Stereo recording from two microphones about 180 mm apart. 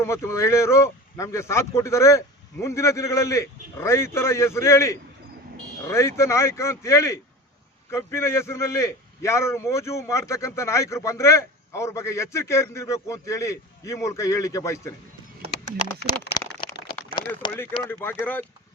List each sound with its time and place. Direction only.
0.0 s a man's voice: 15° left (ahead or behind)
17.6 s a man's voice: 10° left (ahead or behind)